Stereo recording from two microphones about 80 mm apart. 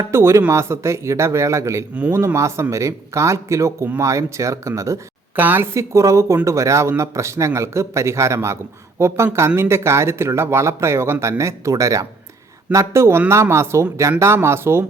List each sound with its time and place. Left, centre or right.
0.1 s speech: right
5.4 s speech: right
5.7 s speech: right